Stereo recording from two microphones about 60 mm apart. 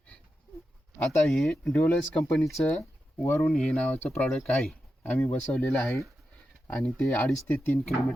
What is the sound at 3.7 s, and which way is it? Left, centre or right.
Speech, left.